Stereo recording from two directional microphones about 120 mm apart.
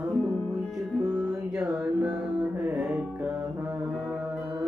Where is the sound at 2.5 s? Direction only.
20° right (ahead or behind).